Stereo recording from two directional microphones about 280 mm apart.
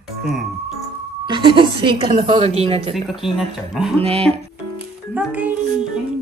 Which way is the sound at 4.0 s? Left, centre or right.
Right.